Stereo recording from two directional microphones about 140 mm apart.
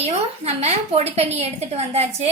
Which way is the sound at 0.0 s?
50° right (ahead or behind).